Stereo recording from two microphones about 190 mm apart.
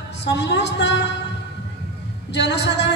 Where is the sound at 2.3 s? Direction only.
65° left (ahead or behind).